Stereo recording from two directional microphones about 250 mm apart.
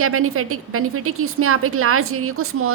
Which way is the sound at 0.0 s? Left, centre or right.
Right.